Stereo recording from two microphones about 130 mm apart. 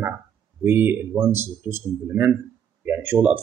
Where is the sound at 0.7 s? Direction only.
15° right (ahead or behind).